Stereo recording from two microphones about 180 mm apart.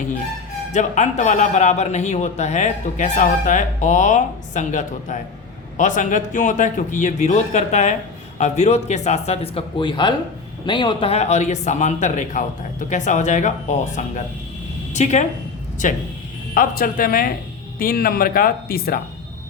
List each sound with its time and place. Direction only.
0.7 s a man's voice: 40° left (ahead or behind)